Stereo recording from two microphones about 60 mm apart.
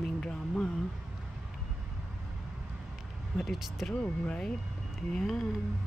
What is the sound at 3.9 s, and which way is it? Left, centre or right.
Speech, centre.